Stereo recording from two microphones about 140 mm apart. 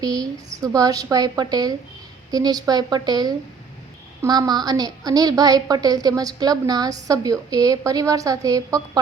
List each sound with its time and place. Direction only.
0.0 s a woman's voice: 25° right (ahead or behind)